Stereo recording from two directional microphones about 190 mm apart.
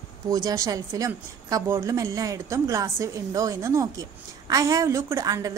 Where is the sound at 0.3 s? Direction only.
20° right (ahead or behind).